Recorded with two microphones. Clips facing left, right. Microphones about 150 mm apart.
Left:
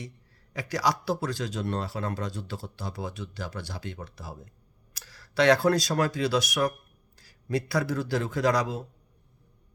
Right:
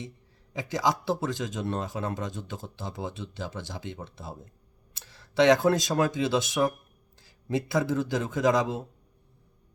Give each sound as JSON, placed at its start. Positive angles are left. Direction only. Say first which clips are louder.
{"t": 0.5, "sound": "speech", "louder": "even", "side_deg": -20}